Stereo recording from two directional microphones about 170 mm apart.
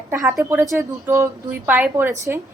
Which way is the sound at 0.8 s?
15° right (ahead or behind).